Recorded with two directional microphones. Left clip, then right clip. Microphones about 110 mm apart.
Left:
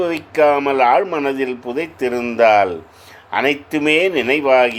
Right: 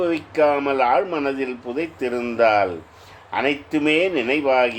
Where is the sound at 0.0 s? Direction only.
45° left (ahead or behind).